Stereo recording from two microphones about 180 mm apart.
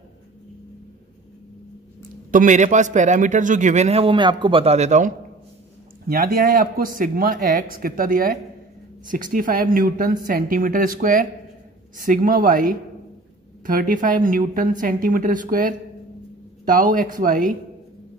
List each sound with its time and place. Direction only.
2.3 s a man's voice: 45° right (ahead or behind)
6.0 s speech: 55° right (ahead or behind)
13.7 s speech: 45° right (ahead or behind)